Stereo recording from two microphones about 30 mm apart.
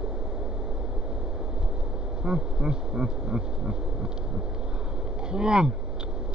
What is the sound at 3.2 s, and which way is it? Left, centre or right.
Speech, right.